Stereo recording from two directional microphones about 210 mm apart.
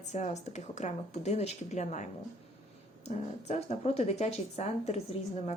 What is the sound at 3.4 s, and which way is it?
Speech, 30° left (ahead or behind).